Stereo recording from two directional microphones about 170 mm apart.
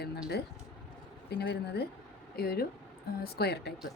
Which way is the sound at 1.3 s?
70° left (ahead or behind).